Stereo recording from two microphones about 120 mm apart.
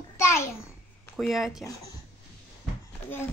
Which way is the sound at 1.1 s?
Centre (ahead or behind).